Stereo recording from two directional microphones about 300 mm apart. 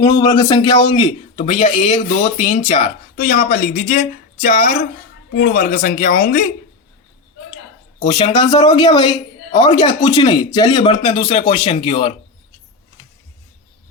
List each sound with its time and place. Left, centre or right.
0.0 s speech: centre
7.9 s speech: left